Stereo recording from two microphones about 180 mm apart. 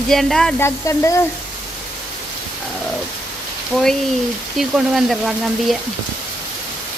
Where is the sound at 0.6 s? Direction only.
15° left (ahead or behind).